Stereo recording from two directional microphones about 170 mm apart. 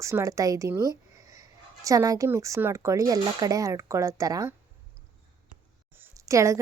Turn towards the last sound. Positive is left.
turn(degrees=-20)  # may be behind; listen again after turning